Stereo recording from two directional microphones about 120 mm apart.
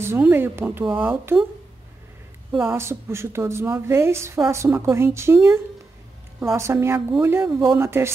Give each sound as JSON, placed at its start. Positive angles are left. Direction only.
{"t": 0.2, "sound": "a woman's voice", "side_deg": -20}
{"t": 2.5, "sound": "a woman's voice", "side_deg": -20}